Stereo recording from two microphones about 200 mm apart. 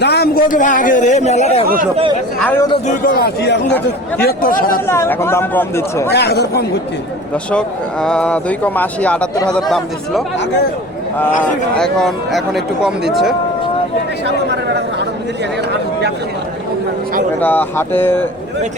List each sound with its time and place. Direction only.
0.0 s a man's voice: 55° left (ahead or behind); by 1.6 s 35° left (ahead or behind)
1.6 s speech: 45° right (ahead or behind)
2.4 s speech: 10° left (ahead or behind)
2.8 s speech: 45° left (ahead or behind)
4.9 s speech: 10° left (ahead or behind)
6.1 s speech: 55° left (ahead or behind)
8.0 s speech: 5° left (ahead or behind)
11.8 s speech: centre (ahead or behind)
17.4 s speech: 10° left (ahead or behind)